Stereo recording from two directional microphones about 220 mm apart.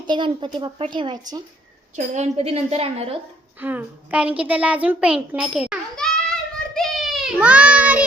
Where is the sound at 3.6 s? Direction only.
10° right (ahead or behind).